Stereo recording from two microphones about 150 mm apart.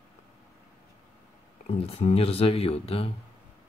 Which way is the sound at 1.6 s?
45° left (ahead or behind).